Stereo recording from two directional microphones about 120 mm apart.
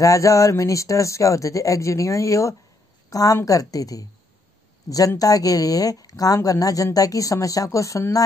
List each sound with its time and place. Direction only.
0.0 s speech: 25° left (ahead or behind)